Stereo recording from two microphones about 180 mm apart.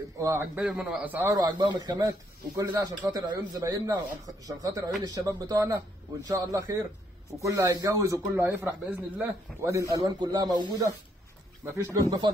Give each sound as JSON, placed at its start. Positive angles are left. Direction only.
{"t": 0.2, "sound": "speech", "side_deg": -15}
{"t": 0.6, "sound": "speech", "side_deg": -5}
{"t": 1.3, "sound": "speech", "side_deg": -25}